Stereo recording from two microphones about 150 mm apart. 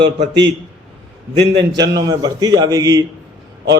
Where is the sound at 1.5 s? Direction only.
30° right (ahead or behind).